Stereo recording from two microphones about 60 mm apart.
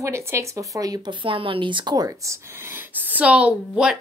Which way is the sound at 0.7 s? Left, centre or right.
Right.